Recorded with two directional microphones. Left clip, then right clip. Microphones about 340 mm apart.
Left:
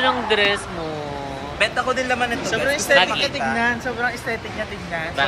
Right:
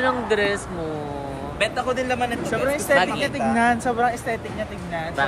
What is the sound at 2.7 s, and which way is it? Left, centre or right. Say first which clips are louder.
Speech: left 3 dB; right.